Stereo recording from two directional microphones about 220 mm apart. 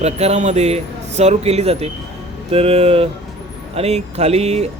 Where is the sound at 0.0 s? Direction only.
30° right (ahead or behind).